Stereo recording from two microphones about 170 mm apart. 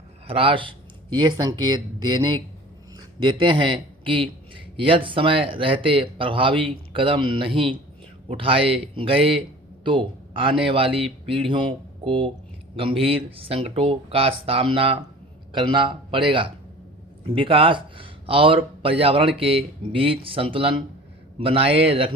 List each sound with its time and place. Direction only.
0.3 s speech: 30° right (ahead or behind)